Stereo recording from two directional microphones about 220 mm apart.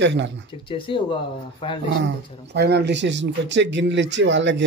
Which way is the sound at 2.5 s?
50° right (ahead or behind).